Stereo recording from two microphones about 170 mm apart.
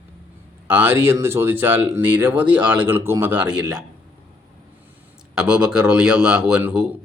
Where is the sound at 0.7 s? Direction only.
10° right (ahead or behind).